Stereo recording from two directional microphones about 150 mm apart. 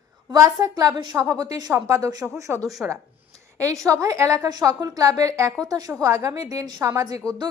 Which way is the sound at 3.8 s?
20° right (ahead or behind).